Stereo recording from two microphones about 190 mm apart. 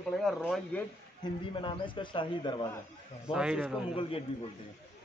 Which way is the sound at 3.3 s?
5° right (ahead or behind).